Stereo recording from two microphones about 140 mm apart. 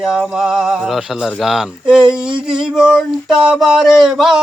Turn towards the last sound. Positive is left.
turn(degrees=0)  # may be behind; listen again after turning